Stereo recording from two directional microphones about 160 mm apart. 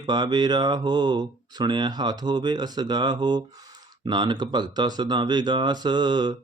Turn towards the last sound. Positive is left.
turn(degrees=-25)  # may be behind; listen again after turning